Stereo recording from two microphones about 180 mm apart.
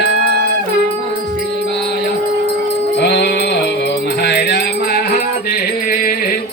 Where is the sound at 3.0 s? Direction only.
70° left (ahead or behind).